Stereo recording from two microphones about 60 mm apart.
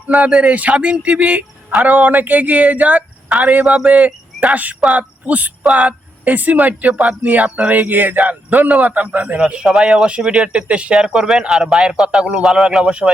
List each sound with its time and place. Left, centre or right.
0.4 s a man's voice: right
3.8 s cricket: right
4.8 s a man's voice: right